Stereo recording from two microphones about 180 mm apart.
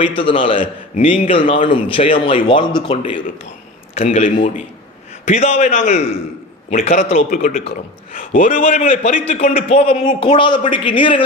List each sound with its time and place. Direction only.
0.2 s a man's voice: 30° left (ahead or behind)
7.3 s a man's voice: 50° left (ahead or behind)
9.6 s a man's voice: 35° left (ahead or behind)
10.2 s speech: 25° left (ahead or behind)